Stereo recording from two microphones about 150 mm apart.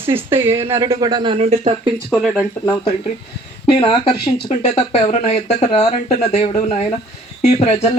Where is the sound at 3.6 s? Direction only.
35° left (ahead or behind).